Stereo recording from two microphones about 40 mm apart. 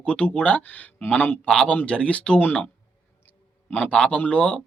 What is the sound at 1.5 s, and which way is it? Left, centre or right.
Speech, left.